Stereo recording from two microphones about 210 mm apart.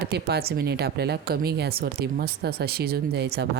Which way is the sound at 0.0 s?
50° right (ahead or behind).